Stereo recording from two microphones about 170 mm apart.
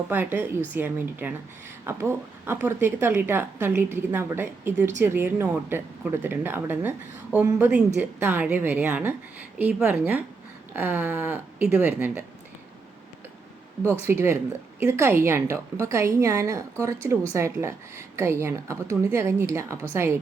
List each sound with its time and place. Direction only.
0.1 s a woman's voice: 10° right (ahead or behind)
14.1 s a woman's voice: 15° right (ahead or behind)